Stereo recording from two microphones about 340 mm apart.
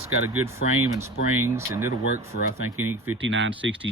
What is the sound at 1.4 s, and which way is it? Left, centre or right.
Speech, centre.